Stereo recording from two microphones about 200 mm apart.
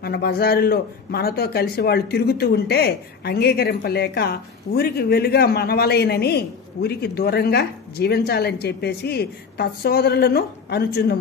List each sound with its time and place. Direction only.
0.0 s a man's voice: 50° left (ahead or behind)